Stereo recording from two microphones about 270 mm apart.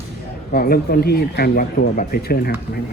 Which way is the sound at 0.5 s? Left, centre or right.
Left.